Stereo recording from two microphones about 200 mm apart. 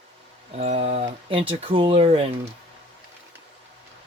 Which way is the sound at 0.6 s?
35° right (ahead or behind).